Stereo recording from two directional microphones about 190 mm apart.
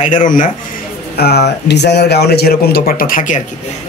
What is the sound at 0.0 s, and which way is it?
Speech, 40° left (ahead or behind).